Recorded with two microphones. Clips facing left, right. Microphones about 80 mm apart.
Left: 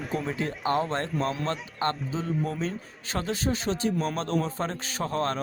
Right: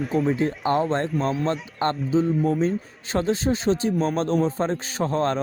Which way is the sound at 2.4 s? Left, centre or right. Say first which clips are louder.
Right 9 dB; right.